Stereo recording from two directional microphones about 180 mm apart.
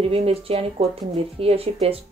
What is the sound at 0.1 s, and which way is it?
Speech, 35° right (ahead or behind).